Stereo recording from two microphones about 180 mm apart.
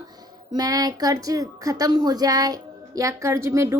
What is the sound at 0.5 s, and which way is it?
A child's voice, 20° right (ahead or behind).